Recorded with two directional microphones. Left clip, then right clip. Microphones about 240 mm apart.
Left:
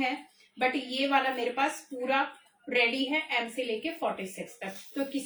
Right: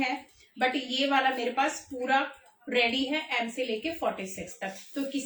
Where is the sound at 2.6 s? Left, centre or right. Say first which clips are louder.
Even; centre.